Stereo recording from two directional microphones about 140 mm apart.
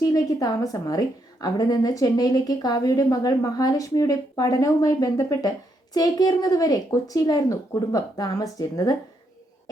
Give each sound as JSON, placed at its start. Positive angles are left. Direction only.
{"t": 0.0, "sound": "a woman's voice", "side_deg": 25}